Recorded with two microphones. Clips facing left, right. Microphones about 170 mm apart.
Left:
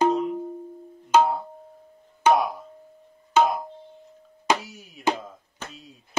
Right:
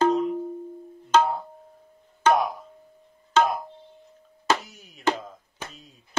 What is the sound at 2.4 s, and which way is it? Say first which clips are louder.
Music: even; centre (ahead or behind).